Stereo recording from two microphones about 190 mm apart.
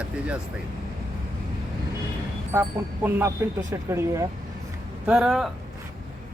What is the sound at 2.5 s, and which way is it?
Speech, 15° right (ahead or behind).